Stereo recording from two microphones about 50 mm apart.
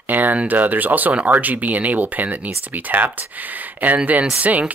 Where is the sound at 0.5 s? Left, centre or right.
Right.